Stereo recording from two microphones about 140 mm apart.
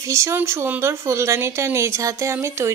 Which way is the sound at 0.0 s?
20° right (ahead or behind).